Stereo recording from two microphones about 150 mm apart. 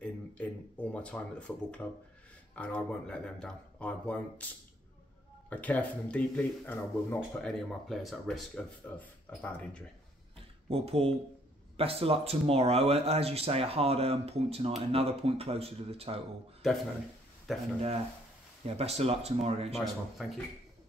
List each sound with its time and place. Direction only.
0.0 s a sound: 10° left (ahead or behind)
1.5 s speech: 10° left (ahead or behind)
5.5 s speech: 10° left (ahead or behind)
7.4 s speech: centre (ahead or behind)
10.7 s speech: 40° right (ahead or behind)
16.6 s speech: centre (ahead or behind)
17.7 s speech: 45° right (ahead or behind)
19.7 s speech: centre (ahead or behind)